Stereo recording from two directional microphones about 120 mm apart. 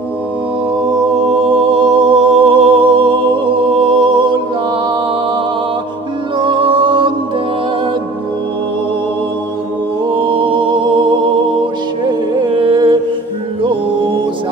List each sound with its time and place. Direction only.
1.7 s music: 45° right (ahead or behind)
6.3 s music: 45° right (ahead or behind)
10.0 s music: 45° right (ahead or behind)